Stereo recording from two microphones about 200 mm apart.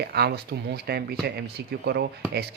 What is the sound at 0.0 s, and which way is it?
Speech, 55° right (ahead or behind).